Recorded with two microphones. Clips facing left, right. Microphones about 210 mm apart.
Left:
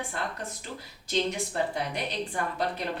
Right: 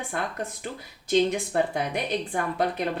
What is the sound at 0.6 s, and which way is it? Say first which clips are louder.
A woman's voice: right 4 dB; 55° right (ahead or behind).